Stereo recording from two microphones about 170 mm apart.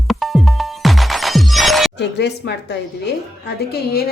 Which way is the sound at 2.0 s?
85° left.